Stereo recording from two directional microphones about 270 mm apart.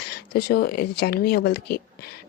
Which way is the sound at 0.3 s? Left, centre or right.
Left.